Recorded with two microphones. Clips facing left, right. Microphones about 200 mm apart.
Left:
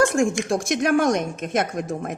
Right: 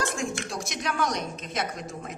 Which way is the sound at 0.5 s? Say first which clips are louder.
Left 12 dB; 50° left (ahead or behind).